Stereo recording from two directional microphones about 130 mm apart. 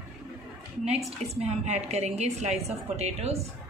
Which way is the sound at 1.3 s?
55° right (ahead or behind).